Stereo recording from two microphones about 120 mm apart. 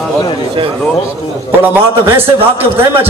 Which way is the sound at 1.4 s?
20° right (ahead or behind).